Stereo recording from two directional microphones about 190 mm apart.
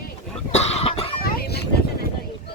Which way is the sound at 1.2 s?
50° left (ahead or behind).